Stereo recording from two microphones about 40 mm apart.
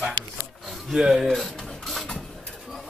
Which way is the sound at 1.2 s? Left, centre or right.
Centre.